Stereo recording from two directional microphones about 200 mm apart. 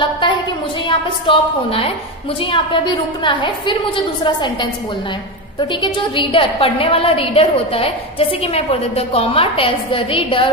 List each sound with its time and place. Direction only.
0.0 s a woman's voice: 25° left (ahead or behind)
5.8 s a woman's voice: 25° left (ahead or behind)